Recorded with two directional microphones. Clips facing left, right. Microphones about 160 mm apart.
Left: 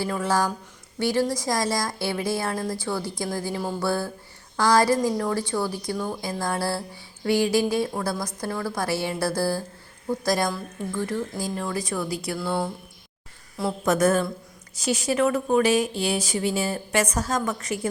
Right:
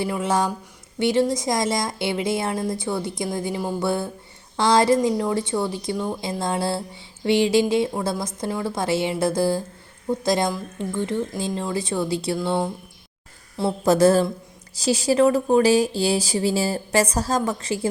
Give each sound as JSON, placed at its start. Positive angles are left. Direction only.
{"t": 0.0, "sound": "speech", "side_deg": -20}
{"t": 13.6, "sound": "speech", "side_deg": -30}